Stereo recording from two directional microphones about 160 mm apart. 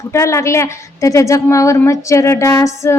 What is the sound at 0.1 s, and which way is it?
A woman's voice, 20° left (ahead or behind).